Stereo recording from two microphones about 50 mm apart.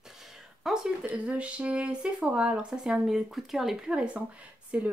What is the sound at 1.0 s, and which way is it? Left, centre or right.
Speech, right.